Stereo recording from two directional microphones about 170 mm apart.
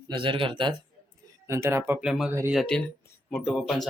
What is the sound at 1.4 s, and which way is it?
Speech, 15° right (ahead or behind).